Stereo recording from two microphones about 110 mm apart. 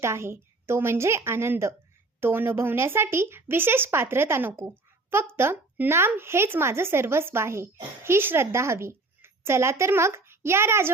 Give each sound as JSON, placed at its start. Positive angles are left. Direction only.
{"t": 0.0, "sound": "speech", "side_deg": -25}